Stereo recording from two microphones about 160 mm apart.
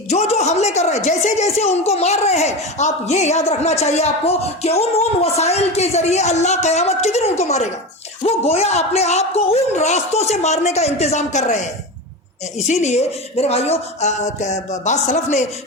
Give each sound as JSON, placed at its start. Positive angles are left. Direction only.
{"t": 0.1, "sound": "speech", "side_deg": 45}